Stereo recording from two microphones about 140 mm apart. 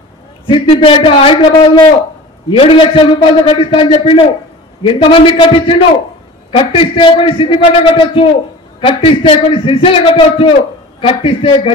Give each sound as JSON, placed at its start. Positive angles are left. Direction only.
{"t": 0.7, "sound": "a man's voice", "side_deg": 40}